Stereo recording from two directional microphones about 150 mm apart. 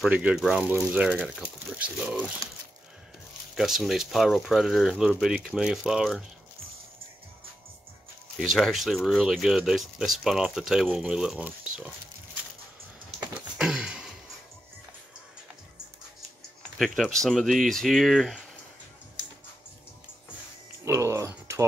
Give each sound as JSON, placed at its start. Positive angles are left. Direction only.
{"t": 0.0, "sound": "speech", "side_deg": -10}
{"t": 3.5, "sound": "speech", "side_deg": 0}
{"t": 8.4, "sound": "speech", "side_deg": 0}
{"t": 13.2, "sound": "a sound", "side_deg": -5}
{"t": 16.7, "sound": "speech", "side_deg": 0}
{"t": 20.8, "sound": "a sound", "side_deg": -20}